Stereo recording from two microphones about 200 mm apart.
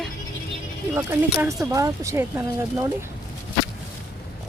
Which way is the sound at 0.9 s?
15° right (ahead or behind).